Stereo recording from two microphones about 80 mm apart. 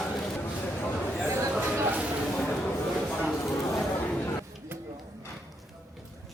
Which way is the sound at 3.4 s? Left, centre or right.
Left.